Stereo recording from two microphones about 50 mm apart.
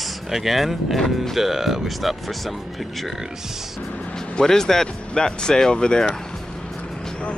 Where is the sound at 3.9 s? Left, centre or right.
Left.